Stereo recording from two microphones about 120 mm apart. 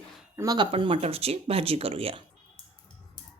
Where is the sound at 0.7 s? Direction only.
45° right (ahead or behind).